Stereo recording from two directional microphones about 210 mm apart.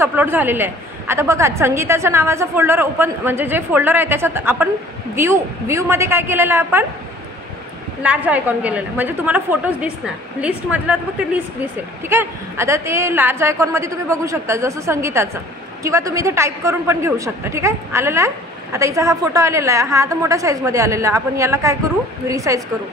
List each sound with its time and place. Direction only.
0.0 s a woman's voice: 10° right (ahead or behind)
8.0 s a woman's voice: 5° right (ahead or behind)